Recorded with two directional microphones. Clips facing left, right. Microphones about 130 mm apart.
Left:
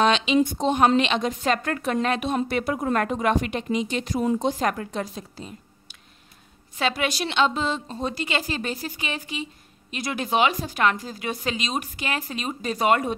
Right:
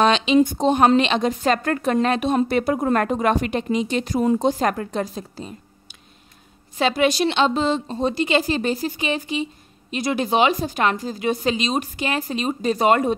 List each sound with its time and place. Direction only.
0.0 s speech: 35° right (ahead or behind)
6.8 s a woman's voice: 25° right (ahead or behind)